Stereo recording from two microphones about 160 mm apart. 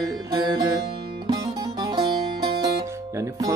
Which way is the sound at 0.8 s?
35° right (ahead or behind).